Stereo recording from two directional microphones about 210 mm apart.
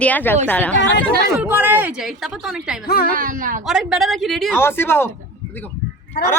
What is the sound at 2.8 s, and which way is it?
Speech, 45° left (ahead or behind).